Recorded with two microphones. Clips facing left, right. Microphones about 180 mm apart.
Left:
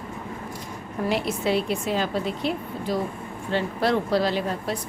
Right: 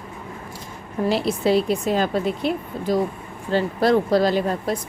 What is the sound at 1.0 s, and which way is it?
A woman's voice, 35° right (ahead or behind).